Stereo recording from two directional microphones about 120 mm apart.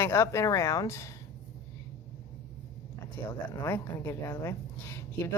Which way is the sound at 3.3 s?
20° left (ahead or behind).